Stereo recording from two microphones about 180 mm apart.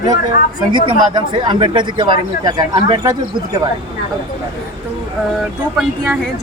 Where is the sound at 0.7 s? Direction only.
25° right (ahead or behind).